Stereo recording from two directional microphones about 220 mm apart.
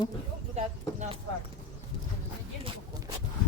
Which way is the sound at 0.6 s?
30° right (ahead or behind).